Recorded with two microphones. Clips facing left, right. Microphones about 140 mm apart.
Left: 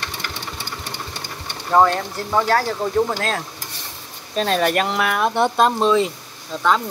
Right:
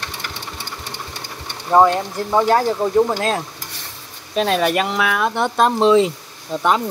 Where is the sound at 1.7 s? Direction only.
15° right (ahead or behind).